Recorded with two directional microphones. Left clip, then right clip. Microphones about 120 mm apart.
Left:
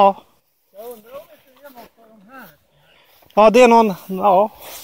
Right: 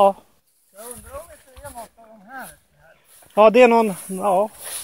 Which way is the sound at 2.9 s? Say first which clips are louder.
Left 5 dB; 50° left (ahead or behind).